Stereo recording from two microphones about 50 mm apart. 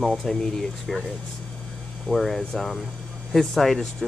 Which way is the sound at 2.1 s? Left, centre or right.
Centre.